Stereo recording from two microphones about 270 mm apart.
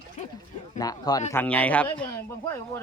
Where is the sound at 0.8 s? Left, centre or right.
Centre.